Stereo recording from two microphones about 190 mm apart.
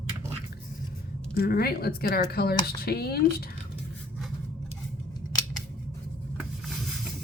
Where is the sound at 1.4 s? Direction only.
55° left (ahead or behind).